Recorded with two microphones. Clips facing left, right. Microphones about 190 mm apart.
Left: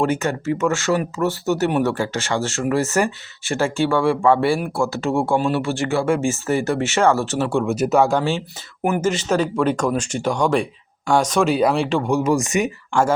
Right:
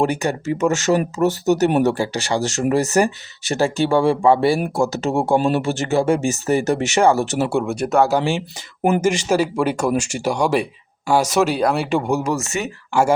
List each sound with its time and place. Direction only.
0.0 s speech: 15° right (ahead or behind)
3.9 s speech: 40° right (ahead or behind)
4.7 s speech: 20° right (ahead or behind)
7.7 s speech: centre (ahead or behind)
12.3 s speech: 15° left (ahead or behind)
12.9 s speech: 10° right (ahead or behind)